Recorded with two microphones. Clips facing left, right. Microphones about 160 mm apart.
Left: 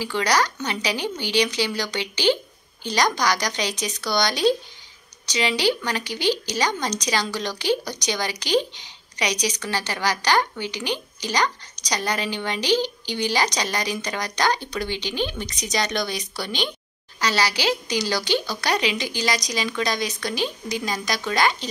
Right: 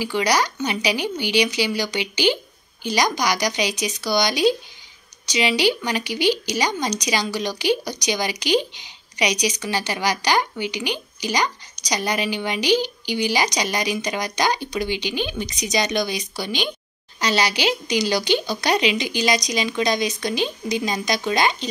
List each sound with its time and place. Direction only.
0.0 s a woman's voice: 10° right (ahead or behind)